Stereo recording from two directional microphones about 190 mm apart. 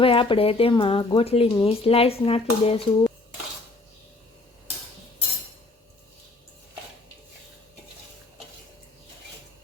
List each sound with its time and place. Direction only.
0.0 s speech: 30° left (ahead or behind)